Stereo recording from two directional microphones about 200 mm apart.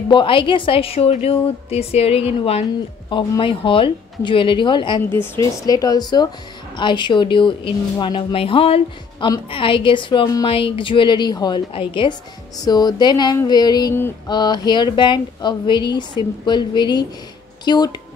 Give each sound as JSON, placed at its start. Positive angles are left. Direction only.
{"t": 0.1, "sound": "a woman's voice", "side_deg": 25}
{"t": 5.1, "sound": "a woman's voice", "side_deg": 10}